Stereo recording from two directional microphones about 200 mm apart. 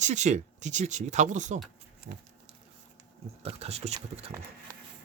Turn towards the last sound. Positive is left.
turn(degrees=-30)  # may be behind; listen again after turning